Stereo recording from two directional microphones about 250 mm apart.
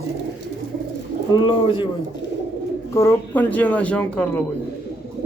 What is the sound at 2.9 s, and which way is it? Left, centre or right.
Speech, centre.